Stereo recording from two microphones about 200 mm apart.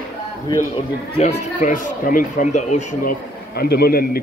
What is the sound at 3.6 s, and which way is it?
Speech, 50° left (ahead or behind).